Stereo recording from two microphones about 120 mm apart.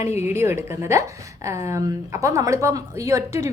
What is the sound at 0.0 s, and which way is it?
Speech, 65° left (ahead or behind).